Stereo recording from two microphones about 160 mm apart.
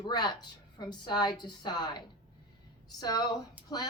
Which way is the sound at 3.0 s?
25° left (ahead or behind).